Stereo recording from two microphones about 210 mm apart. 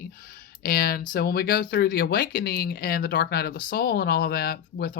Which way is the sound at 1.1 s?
45° left (ahead or behind).